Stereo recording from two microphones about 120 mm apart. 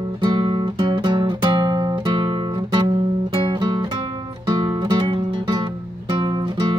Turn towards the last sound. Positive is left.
turn(degrees=-40)  # may be behind; listen again after turning